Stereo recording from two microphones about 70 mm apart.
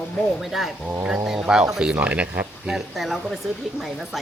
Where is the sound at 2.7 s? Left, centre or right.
Centre.